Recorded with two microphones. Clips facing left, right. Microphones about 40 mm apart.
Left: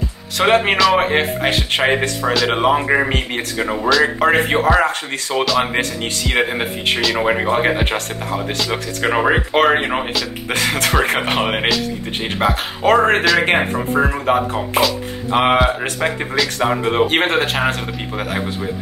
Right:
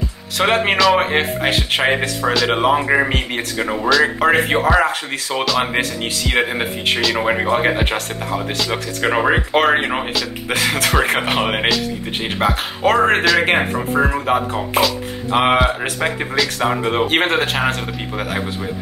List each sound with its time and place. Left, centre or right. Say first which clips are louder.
0.4 s speech: left 1 dB; centre